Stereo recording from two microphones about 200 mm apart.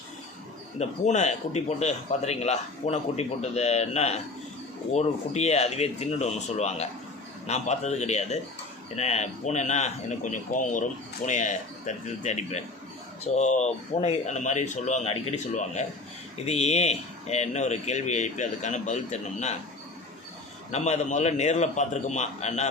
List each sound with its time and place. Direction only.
0.8 s a man's voice: 35° left (ahead or behind)
20.7 s a man's voice: 35° left (ahead or behind)